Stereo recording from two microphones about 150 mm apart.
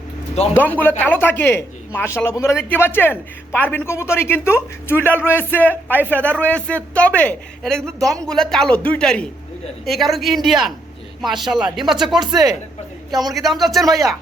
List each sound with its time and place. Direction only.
0.5 s speech: 10° left (ahead or behind)
12.2 s a man's voice: 25° right (ahead or behind)
13.3 s speech: centre (ahead or behind)